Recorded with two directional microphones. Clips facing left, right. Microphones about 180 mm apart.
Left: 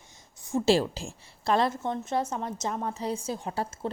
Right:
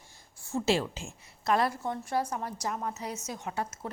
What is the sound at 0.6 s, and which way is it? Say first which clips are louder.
A woman's voice: left 5 dB; 35° left (ahead or behind).